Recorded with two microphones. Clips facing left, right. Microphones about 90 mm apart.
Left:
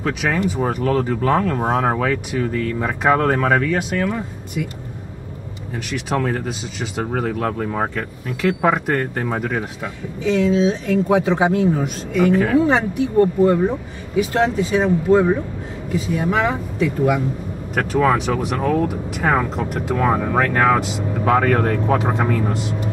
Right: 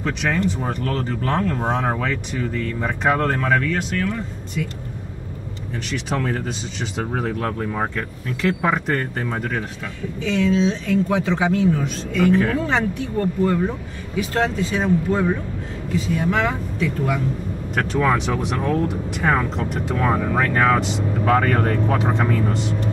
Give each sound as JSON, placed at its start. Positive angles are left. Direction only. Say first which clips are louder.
{"t": 0.0, "sound": "speech", "louder": "left 1 dB", "side_deg": 5}
{"t": 5.9, "sound": "speech", "louder": "left 3 dB", "side_deg": 5}
{"t": 20.0, "sound": "speech", "louder": "left 2 dB", "side_deg": 15}
{"t": 20.3, "sound": "speech", "louder": "left 2 dB", "side_deg": 5}